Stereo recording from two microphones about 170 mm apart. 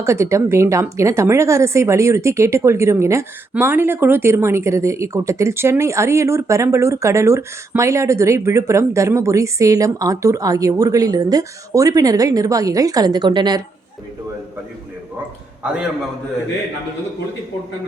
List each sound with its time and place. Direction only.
0.0 s a woman's voice: 15° right (ahead or behind)